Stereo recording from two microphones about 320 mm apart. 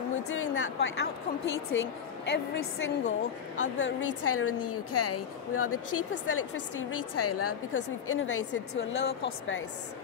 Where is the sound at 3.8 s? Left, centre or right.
Left.